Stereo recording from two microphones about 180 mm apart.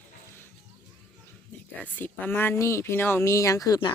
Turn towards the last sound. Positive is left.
turn(degrees=25)  # may be behind; listen again after turning